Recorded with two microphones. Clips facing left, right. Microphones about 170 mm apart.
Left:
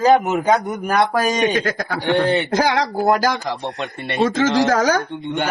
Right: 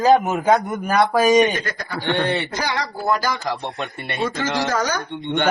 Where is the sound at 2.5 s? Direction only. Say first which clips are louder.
Left 7 dB; 90° left.